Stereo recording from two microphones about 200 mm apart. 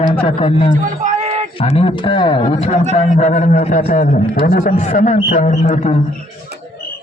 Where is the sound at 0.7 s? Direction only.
40° right (ahead or behind).